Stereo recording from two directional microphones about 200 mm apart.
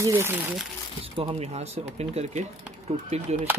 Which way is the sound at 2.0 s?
30° right (ahead or behind).